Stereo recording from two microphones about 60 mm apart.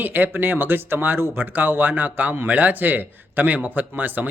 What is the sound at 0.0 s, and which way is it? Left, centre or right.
Speech, right.